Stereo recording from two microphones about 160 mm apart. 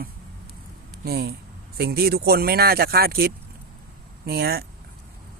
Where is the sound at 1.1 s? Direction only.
75° right (ahead or behind).